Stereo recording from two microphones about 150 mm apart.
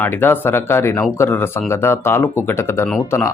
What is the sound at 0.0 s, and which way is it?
Speech, 15° left (ahead or behind).